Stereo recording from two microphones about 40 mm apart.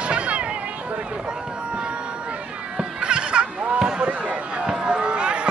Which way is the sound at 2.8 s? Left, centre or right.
Right.